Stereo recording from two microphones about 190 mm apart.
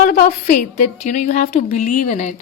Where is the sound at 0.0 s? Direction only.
50° left (ahead or behind).